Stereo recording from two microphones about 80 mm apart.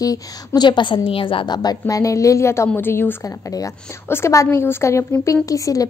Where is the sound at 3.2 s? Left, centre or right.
Left.